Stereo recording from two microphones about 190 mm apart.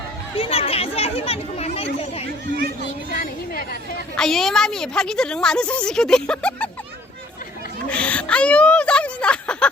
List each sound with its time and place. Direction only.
0.3 s speech: 30° left (ahead or behind)
3.1 s a woman's voice: 45° left (ahead or behind)
4.2 s a woman's voice: centre (ahead or behind)
7.9 s whimper: 5° left (ahead or behind)